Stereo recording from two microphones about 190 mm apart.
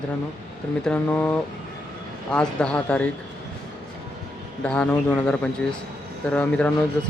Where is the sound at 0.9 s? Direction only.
10° left (ahead or behind).